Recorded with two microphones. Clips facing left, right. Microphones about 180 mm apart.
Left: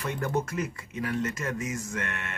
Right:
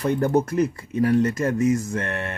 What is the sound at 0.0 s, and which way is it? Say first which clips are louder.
Speech: right 9 dB; 35° right (ahead or behind).